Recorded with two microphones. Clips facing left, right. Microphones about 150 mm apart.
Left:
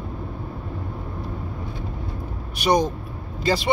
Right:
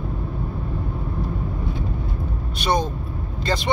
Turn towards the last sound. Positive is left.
turn(degrees=5)  # may be behind; listen again after turning